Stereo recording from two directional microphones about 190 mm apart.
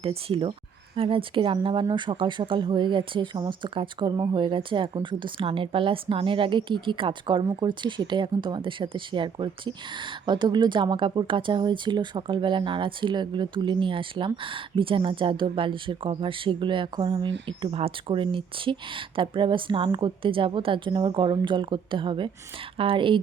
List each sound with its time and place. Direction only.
0.0 s speech: 30° right (ahead or behind)